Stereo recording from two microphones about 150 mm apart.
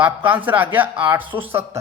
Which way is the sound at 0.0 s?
10° right (ahead or behind).